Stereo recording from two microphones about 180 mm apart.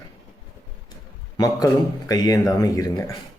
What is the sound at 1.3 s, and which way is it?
Speech, 20° left (ahead or behind).